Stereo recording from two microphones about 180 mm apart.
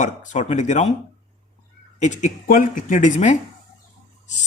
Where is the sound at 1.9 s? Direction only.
40° left (ahead or behind).